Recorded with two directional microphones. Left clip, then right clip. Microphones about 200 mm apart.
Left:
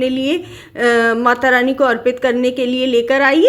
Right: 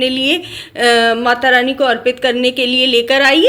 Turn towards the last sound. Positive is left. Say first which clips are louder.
# right 1 dB
turn(degrees=40)  # may be behind; listen again after turning